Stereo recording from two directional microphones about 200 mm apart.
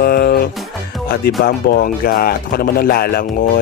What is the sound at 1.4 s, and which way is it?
Speech, 50° left (ahead or behind).